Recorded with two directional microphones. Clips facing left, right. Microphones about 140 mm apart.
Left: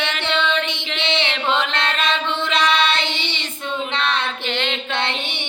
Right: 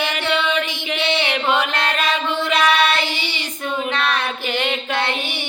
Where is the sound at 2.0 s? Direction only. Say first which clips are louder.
Right 1 dB; 25° left (ahead or behind).